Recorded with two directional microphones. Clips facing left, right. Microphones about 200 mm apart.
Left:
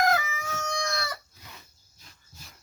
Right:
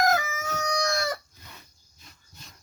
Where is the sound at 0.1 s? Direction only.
45° right (ahead or behind).